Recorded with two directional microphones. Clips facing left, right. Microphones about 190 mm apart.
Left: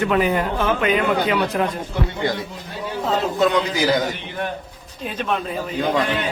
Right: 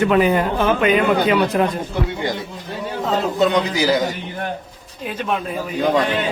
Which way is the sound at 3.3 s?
25° right (ahead or behind).